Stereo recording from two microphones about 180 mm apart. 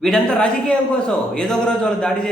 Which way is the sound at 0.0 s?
5° left (ahead or behind).